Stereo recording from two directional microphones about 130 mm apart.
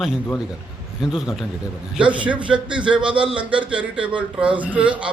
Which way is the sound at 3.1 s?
40° right (ahead or behind).